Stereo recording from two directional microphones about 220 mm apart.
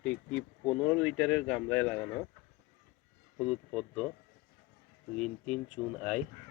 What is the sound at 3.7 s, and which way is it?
Speech, centre (ahead or behind).